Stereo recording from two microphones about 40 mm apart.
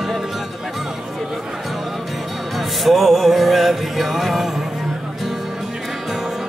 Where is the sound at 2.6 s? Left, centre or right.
Centre.